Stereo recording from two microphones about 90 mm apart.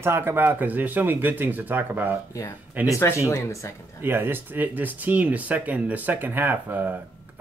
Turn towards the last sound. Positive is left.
turn(degrees=-20)  # may be behind; listen again after turning